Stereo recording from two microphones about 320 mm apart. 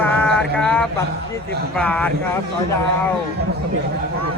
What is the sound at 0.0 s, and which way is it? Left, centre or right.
Mantra, centre.